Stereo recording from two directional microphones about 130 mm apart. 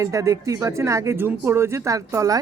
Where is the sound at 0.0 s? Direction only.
25° right (ahead or behind).